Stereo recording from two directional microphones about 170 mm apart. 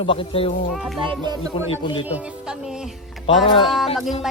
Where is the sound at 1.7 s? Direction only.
30° left (ahead or behind).